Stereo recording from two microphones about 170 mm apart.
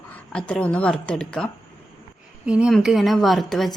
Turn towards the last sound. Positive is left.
turn(degrees=0)  # may be behind; listen again after turning